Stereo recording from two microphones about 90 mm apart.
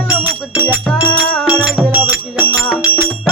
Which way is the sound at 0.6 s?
15° left (ahead or behind).